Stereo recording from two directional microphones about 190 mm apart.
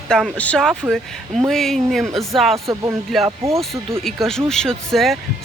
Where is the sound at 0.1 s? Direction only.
5° left (ahead or behind).